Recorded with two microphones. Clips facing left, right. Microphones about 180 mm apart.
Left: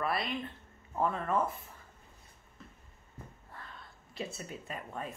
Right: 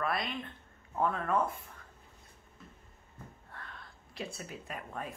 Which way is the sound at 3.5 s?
Centre (ahead or behind).